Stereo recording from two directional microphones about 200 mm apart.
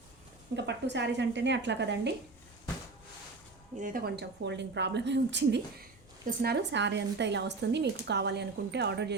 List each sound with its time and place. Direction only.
0.5 s a woman's voice: 60° right (ahead or behind)
3.8 s a woman's voice: 40° right (ahead or behind); by 9.1 s 55° right (ahead or behind)